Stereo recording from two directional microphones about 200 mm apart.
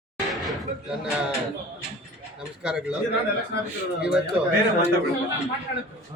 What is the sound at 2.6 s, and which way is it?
Speech, 5° right (ahead or behind).